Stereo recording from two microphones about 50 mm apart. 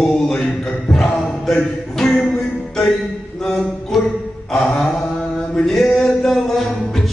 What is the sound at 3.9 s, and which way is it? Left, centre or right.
Music, centre.